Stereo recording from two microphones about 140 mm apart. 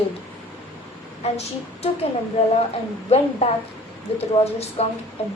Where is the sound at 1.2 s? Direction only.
45° left (ahead or behind).